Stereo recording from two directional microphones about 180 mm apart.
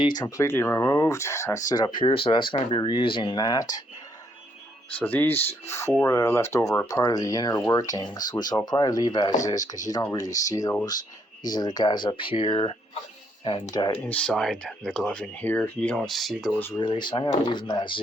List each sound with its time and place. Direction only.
0.0 s speech: 20° left (ahead or behind)
4.9 s speech: 10° left (ahead or behind)
14.0 s speech: 10° left (ahead or behind)
16.7 s speech: 25° left (ahead or behind)